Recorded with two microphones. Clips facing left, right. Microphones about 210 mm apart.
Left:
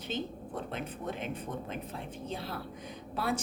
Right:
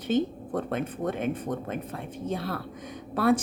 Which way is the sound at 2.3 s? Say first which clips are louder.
Right 8 dB; 60° right (ahead or behind).